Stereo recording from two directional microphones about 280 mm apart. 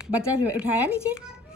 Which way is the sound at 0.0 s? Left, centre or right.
Centre.